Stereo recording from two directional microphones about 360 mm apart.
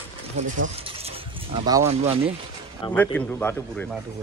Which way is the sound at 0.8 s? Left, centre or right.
Centre.